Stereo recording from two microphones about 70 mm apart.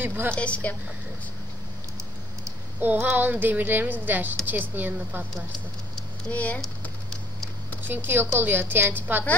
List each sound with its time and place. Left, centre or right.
0.0 s a woman's voice: right
0.4 s a woman's voice: centre
2.8 s speech: right
6.3 s a woman's voice: left
7.8 s a woman's voice: right